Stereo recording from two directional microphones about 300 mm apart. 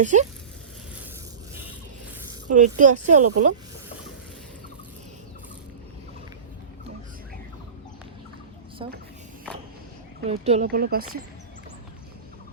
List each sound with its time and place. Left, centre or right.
0.0 s speech: right
2.5 s speech: right
8.8 s a woman's voice: centre
10.2 s speech: right